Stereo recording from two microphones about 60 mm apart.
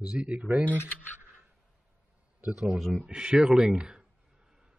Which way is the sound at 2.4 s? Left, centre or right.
Right.